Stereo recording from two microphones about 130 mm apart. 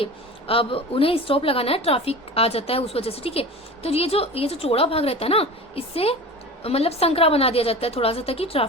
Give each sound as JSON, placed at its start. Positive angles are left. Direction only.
{"t": 0.0, "sound": "a woman's voice", "side_deg": 45}